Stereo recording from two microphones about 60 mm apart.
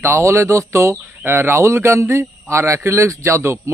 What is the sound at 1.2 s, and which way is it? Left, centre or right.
Speech, right.